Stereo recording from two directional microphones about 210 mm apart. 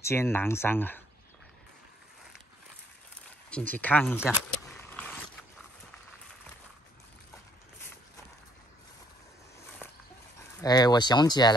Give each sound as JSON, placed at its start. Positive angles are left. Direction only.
{"t": 0.0, "sound": "speech", "side_deg": 10}
{"t": 3.4, "sound": "a sound", "side_deg": 5}
{"t": 10.6, "sound": "speech", "side_deg": 20}